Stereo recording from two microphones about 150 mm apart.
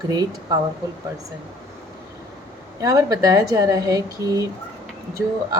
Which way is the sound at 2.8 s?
20° right (ahead or behind).